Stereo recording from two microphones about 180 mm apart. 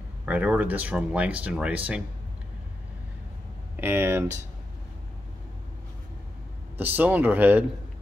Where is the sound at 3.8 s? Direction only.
10° right (ahead or behind).